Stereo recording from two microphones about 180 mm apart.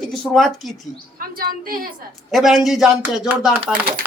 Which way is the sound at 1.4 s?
55° right (ahead or behind).